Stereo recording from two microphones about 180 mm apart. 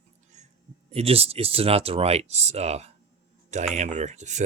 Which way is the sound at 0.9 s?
35° right (ahead or behind).